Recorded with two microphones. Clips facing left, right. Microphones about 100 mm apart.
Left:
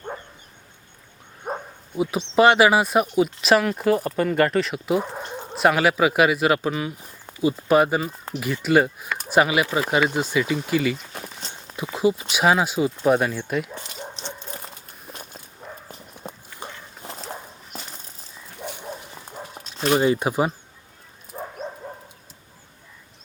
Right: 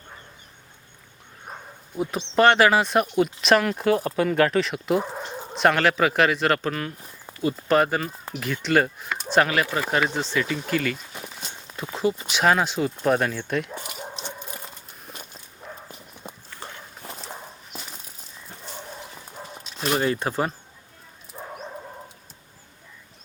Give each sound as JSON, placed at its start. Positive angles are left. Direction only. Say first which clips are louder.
{"t": 1.5, "sound": "bow-wow", "louder": "left 10 dB", "side_deg": 40}
{"t": 2.0, "sound": "speech", "louder": "left 2 dB", "side_deg": 5}
{"t": 11.5, "sound": "a sound", "louder": "left 3 dB", "side_deg": 5}
{"t": 12.3, "sound": "speech", "louder": "left 1 dB", "side_deg": 5}
{"t": 14.1, "sound": "a sound", "louder": "even", "side_deg": -10}
{"t": 15.6, "sound": "clip-clop", "louder": "left 1 dB", "side_deg": 0}
{"t": 17.1, "sound": "dog", "louder": "left 3 dB", "side_deg": 0}
{"t": 18.8, "sound": "dog", "louder": "left 3 dB", "side_deg": 10}
{"t": 20.0, "sound": "speech", "louder": "left 3 dB", "side_deg": 10}
{"t": 21.3, "sound": "dog", "louder": "left 5 dB", "side_deg": 20}